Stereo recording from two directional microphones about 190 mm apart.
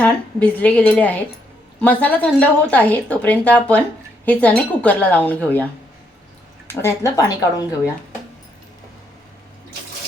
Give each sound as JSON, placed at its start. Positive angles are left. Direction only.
{"t": 0.0, "sound": "speech", "side_deg": 5}
{"t": 6.8, "sound": "speech", "side_deg": 15}